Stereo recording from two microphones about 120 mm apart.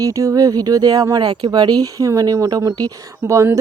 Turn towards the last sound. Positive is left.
turn(degrees=-25)  # may be behind; listen again after turning